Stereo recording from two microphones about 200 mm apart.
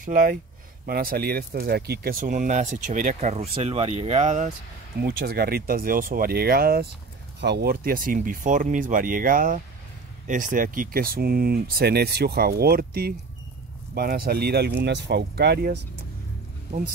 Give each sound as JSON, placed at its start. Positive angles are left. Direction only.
{"t": 0.0, "sound": "speech", "side_deg": -40}
{"t": 5.0, "sound": "speech", "side_deg": -50}